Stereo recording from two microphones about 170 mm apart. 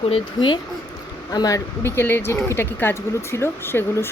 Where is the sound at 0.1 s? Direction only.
30° left (ahead or behind).